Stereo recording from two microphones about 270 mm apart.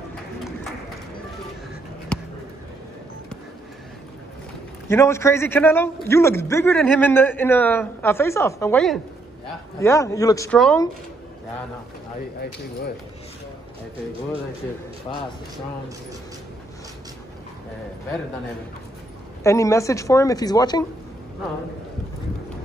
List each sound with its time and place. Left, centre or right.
4.8 s a man's voice: centre
15.1 s speech: centre
19.4 s a man's voice: centre